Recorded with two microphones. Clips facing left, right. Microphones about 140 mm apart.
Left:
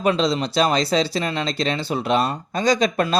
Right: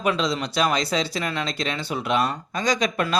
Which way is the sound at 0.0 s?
30° left (ahead or behind).